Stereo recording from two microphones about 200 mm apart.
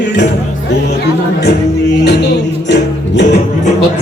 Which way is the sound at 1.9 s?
60° left (ahead or behind).